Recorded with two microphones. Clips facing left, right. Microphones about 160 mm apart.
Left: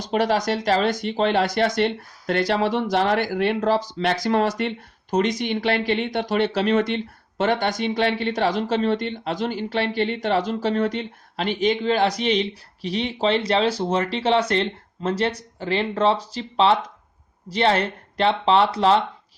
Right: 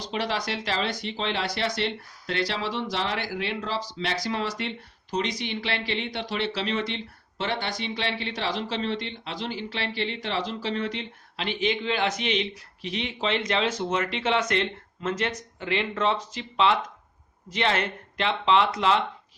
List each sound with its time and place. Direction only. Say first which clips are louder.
0.0 s speech: left 8 dB; 45° left (ahead or behind)